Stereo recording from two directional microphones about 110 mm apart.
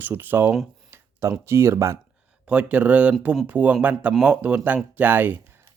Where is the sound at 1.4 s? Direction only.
25° right (ahead or behind).